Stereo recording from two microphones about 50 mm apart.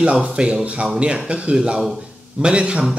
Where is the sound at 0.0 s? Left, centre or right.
Right.